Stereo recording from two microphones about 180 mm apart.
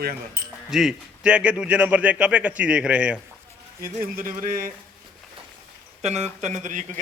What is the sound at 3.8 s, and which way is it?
Speech, 50° right (ahead or behind).